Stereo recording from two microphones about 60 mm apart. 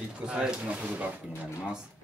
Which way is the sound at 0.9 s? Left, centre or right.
Right.